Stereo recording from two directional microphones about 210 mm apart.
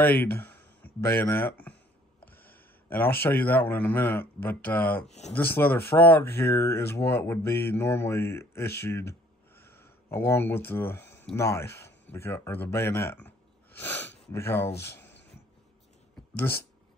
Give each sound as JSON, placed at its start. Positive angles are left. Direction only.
{"t": 0.0, "sound": "a man's voice", "side_deg": 10}
{"t": 5.0, "sound": "speech", "side_deg": 30}
{"t": 5.3, "sound": "speech", "side_deg": 10}
{"t": 16.2, "sound": "a sound", "side_deg": 10}